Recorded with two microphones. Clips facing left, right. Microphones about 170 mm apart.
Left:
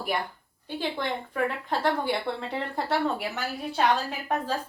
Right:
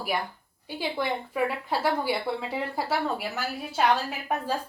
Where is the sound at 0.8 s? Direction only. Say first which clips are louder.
Right 1 dB; 10° right (ahead or behind).